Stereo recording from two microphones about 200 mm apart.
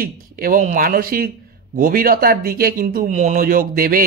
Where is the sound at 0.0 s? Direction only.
45° right (ahead or behind).